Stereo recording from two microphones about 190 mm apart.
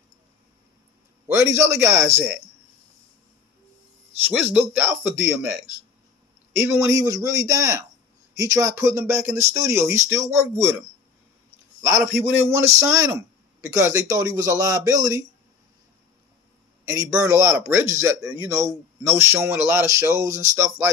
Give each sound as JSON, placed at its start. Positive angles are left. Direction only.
{"t": 1.2, "sound": "a man's voice", "side_deg": -15}
{"t": 4.2, "sound": "a man's voice", "side_deg": -10}
{"t": 6.5, "sound": "a man's voice", "side_deg": -10}
{"t": 11.8, "sound": "a man's voice", "side_deg": -15}
{"t": 17.3, "sound": "a man's voice", "side_deg": -15}